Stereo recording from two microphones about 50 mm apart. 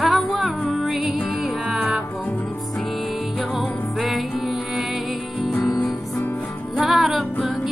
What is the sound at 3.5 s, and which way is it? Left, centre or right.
Music, centre.